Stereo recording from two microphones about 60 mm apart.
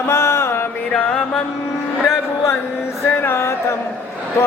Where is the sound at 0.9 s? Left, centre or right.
Centre.